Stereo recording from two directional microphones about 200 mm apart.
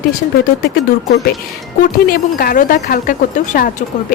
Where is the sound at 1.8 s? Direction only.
45° left (ahead or behind).